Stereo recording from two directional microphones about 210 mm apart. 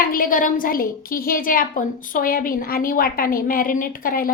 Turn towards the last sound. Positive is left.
turn(degrees=45)  # may be behind; listen again after turning